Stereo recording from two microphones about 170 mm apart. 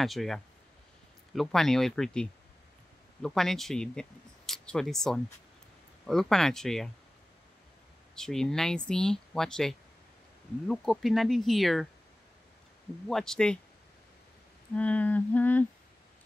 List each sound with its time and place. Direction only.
0.0 s speech: centre (ahead or behind)
8.2 s speech: 5° left (ahead or behind)
13.1 s speech: 5° left (ahead or behind)
14.8 s a sound: 10° left (ahead or behind)